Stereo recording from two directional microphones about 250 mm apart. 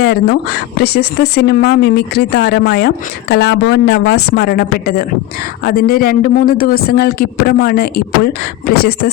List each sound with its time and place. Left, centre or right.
0.0 s speech: left